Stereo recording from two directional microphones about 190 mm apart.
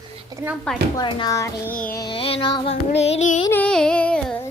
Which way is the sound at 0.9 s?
20° left (ahead or behind).